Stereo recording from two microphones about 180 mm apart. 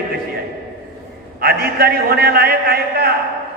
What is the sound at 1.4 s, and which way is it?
A man's voice, 60° right (ahead or behind).